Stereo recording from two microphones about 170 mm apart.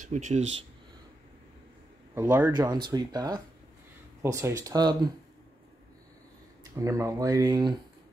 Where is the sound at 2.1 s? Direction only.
10° right (ahead or behind).